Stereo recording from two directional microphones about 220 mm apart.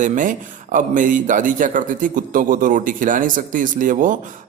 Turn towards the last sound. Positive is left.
turn(degrees=-35)  # may be behind; listen again after turning